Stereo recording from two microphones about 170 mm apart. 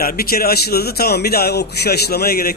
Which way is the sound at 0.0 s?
60° left (ahead or behind).